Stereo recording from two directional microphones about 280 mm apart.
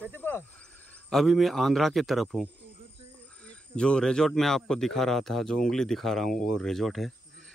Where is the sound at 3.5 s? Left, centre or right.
Centre.